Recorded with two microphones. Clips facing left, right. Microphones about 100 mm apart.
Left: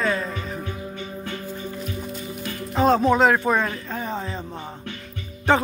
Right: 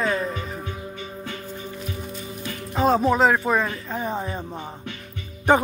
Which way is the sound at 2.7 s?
5° right (ahead or behind).